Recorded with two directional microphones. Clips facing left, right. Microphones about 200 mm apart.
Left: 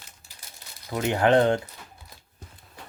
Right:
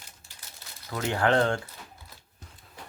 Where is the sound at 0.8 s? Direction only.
20° left (ahead or behind).